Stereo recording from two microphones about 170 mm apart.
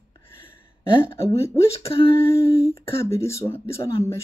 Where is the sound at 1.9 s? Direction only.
35° left (ahead or behind).